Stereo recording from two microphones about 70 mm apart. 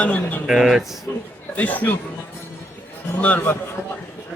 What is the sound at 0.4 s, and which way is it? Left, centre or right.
Speech, centre.